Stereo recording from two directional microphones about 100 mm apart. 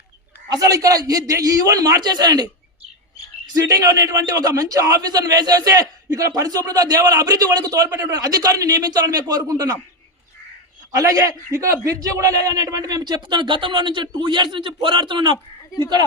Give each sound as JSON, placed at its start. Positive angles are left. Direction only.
{"t": 0.4, "sound": "a man's voice", "side_deg": -40}
{"t": 10.9, "sound": "a man's voice", "side_deg": -35}